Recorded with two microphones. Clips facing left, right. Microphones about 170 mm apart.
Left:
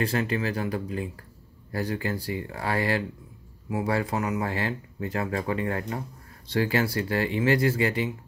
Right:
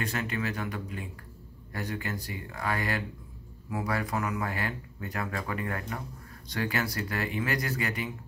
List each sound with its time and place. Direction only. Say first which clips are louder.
0.0 s speech: left 6 dB; 30° left (ahead or behind)